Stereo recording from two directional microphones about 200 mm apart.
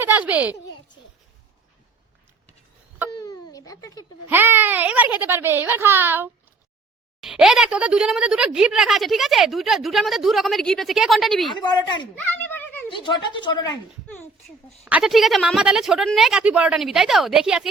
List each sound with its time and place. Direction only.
0.0 s a child's voice: 10° right (ahead or behind)
3.1 s baby cry: 20° left (ahead or behind)
4.3 s a child's voice: 10° right (ahead or behind)
11.5 s speech: 20° left (ahead or behind)
12.1 s a sound: 10° left (ahead or behind)
12.9 s speech: 25° left (ahead or behind)
14.8 s speech: 5° right (ahead or behind)